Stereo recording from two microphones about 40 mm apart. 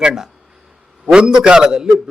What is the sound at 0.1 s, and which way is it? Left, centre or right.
A man's voice, centre.